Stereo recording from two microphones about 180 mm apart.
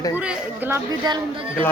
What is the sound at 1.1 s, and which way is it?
Speech, 20° right (ahead or behind).